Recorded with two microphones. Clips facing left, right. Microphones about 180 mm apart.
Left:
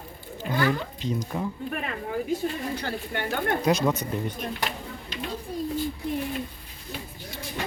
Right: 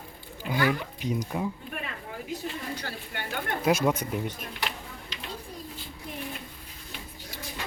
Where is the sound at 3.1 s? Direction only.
50° left (ahead or behind).